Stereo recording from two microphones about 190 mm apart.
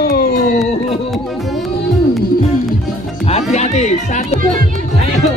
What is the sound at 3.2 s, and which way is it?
Music, 35° left (ahead or behind).